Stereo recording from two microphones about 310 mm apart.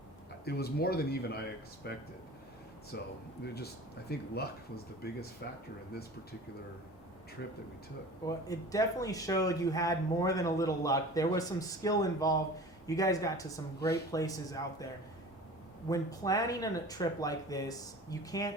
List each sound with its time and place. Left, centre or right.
0.4 s speech: left
8.3 s speech: centre
15.9 s speech: centre